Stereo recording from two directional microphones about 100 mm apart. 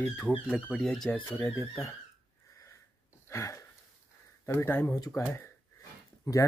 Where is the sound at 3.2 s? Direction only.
30° left (ahead or behind).